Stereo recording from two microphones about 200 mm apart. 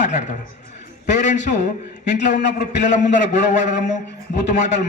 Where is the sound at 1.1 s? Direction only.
40° left (ahead or behind).